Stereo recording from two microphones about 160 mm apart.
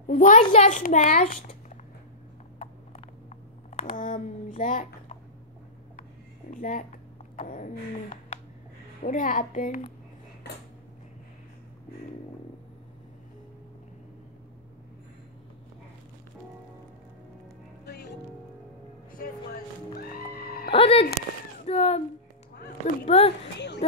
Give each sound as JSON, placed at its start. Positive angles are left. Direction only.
{"t": 0.1, "sound": "a child's voice", "side_deg": 55}
{"t": 3.8, "sound": "a child's voice", "side_deg": 55}
{"t": 6.5, "sound": "a child's voice", "side_deg": 55}
{"t": 20.2, "sound": "music", "side_deg": 70}
{"t": 20.7, "sound": "speech", "side_deg": 40}
{"t": 23.0, "sound": "speech", "side_deg": 40}